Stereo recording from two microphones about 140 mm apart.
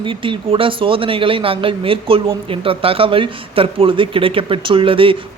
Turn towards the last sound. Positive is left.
turn(degrees=-40)  # may be behind; listen again after turning